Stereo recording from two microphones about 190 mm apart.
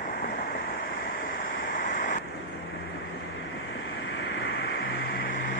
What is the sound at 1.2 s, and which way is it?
Waves, 45° left (ahead or behind).